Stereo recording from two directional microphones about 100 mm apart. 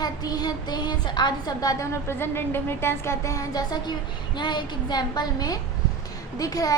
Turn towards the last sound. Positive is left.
turn(degrees=40)  # may be behind; listen again after turning